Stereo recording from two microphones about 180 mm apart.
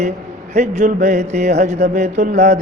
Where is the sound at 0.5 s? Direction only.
40° right (ahead or behind).